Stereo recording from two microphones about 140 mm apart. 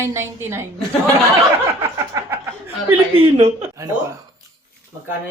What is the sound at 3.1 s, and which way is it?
Speech, 40° right (ahead or behind).